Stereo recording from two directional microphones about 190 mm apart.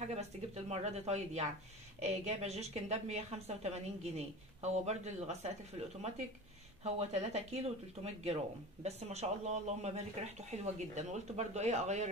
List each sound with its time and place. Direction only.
0.7 s speech: 35° right (ahead or behind)